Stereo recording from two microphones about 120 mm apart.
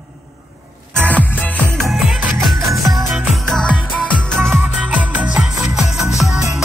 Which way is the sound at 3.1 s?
Centre (ahead or behind).